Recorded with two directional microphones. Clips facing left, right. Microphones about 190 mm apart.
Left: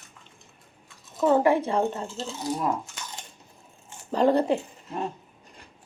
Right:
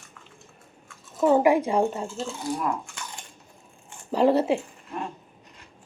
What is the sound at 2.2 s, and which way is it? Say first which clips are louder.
Speech: left 1 dB; 20° left (ahead or behind).